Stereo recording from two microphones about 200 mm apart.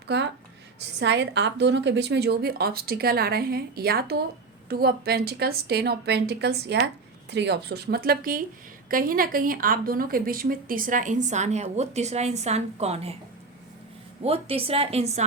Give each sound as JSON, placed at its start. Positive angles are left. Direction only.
{"t": 0.1, "sound": "a woman's voice", "side_deg": -55}
{"t": 14.3, "sound": "a woman's voice", "side_deg": -30}